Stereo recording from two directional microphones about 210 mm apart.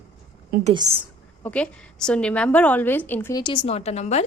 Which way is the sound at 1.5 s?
5° left (ahead or behind).